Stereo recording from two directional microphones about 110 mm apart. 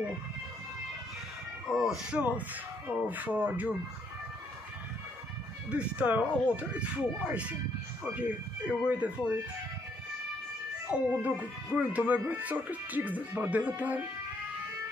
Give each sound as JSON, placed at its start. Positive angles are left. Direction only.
{"t": 1.7, "sound": "speech", "side_deg": -5}
{"t": 5.7, "sound": "speech", "side_deg": -10}
{"t": 8.0, "sound": "speech", "side_deg": -15}
{"t": 10.9, "sound": "speech", "side_deg": -15}